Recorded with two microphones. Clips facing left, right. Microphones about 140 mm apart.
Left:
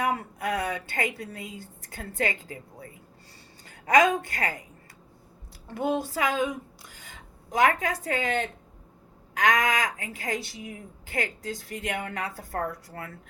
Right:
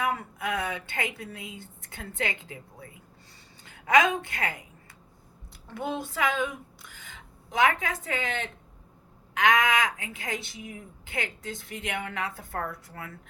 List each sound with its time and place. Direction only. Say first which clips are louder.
0.0 s a woman's voice: left 2 dB; 40° left (ahead or behind)
5.7 s a woman's voice: left 5 dB; 40° left (ahead or behind)